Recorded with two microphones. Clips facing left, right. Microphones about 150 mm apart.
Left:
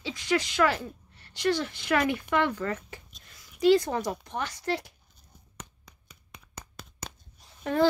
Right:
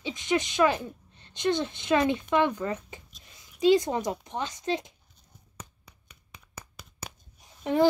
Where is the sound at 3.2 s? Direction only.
20° right (ahead or behind).